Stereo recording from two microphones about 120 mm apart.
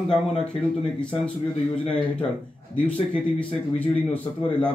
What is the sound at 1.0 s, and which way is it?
Speech, 10° left (ahead or behind).